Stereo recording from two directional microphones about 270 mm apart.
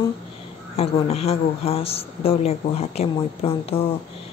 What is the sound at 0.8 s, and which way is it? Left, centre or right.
Speech, left.